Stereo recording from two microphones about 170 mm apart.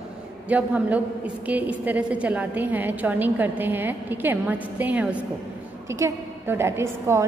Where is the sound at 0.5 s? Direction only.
10° right (ahead or behind).